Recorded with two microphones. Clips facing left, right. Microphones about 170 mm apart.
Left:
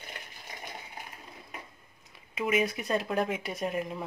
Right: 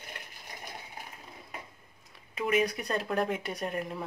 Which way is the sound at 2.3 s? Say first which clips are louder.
Even; centre (ahead or behind).